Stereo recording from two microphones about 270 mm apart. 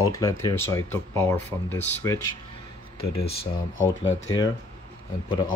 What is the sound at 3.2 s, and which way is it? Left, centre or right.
Speech, left.